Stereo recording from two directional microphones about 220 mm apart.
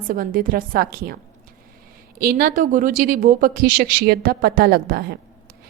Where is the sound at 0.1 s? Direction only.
40° right (ahead or behind).